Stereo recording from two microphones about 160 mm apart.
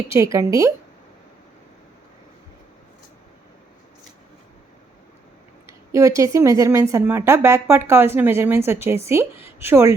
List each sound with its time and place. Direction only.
0.1 s a woman's voice: 20° right (ahead or behind)
5.6 s speech: 20° right (ahead or behind)